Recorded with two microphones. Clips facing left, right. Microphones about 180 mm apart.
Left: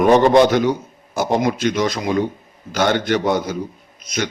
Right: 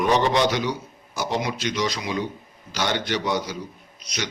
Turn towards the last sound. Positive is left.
turn(degrees=50)  # may be behind; listen again after turning